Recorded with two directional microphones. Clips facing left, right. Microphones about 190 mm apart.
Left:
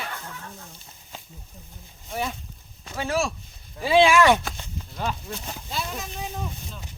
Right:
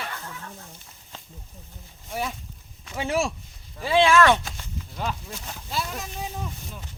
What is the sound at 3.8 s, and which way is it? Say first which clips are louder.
Speech: left 1 dB; 10° left (ahead or behind).